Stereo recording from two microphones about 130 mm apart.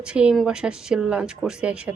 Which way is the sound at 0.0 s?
5° right (ahead or behind).